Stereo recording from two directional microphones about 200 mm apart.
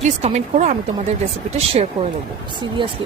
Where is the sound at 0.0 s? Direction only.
35° right (ahead or behind).